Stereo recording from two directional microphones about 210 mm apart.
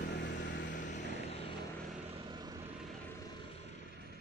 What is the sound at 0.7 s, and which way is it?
Vehicle, 35° left (ahead or behind).